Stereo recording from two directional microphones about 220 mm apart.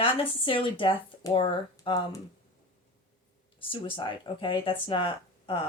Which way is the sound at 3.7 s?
20° left (ahead or behind).